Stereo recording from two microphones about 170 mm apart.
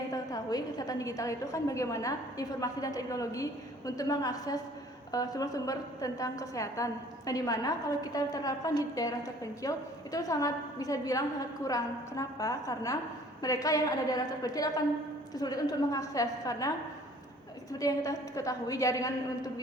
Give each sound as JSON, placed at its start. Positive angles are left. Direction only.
{"t": 0.1, "sound": "a woman's voice", "side_deg": 20}